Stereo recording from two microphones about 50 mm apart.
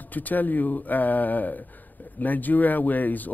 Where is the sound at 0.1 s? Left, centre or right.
Left.